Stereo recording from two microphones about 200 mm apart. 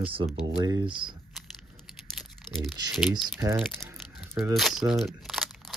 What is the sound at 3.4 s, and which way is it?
Speech, 15° right (ahead or behind).